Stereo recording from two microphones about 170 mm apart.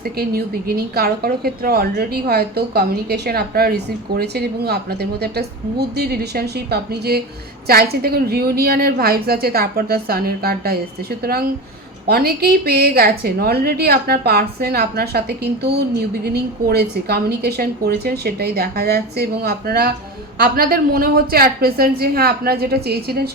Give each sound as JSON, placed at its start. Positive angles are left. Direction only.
{"t": 0.0, "sound": "a woman's voice", "side_deg": -65}